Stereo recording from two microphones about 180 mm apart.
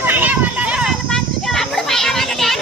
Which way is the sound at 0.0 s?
10° right (ahead or behind).